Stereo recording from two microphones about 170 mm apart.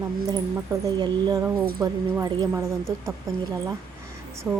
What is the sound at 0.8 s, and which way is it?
Speech, 20° right (ahead or behind).